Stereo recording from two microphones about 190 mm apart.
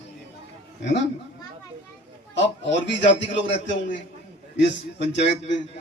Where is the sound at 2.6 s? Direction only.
70° left (ahead or behind).